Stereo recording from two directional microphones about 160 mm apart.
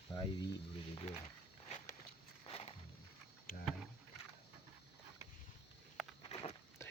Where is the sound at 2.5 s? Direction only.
35° left (ahead or behind).